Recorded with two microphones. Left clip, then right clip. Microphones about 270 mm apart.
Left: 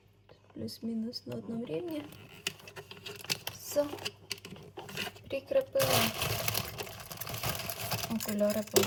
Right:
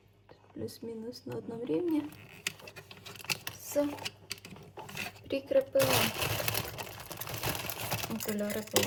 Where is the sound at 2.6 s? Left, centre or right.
Centre.